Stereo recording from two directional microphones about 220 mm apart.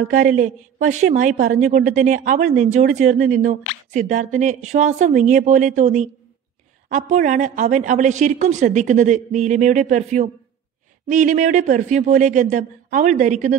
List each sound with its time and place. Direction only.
0.1 s a woman's voice: 35° right (ahead or behind)